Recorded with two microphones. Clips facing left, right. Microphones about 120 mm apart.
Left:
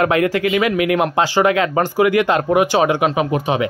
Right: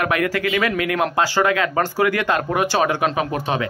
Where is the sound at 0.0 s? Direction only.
25° left (ahead or behind).